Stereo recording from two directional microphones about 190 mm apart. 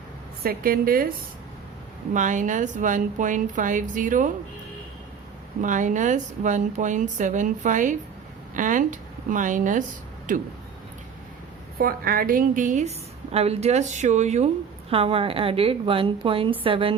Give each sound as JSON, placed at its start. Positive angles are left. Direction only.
{"t": 0.4, "sound": "a woman's voice", "side_deg": -50}
{"t": 2.1, "sound": "a woman's voice", "side_deg": -40}
{"t": 5.6, "sound": "a woman's voice", "side_deg": -40}
{"t": 11.8, "sound": "a woman's voice", "side_deg": -50}